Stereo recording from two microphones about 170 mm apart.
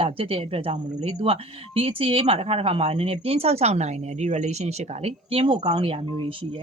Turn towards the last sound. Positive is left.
turn(degrees=-30)  # may be behind; listen again after turning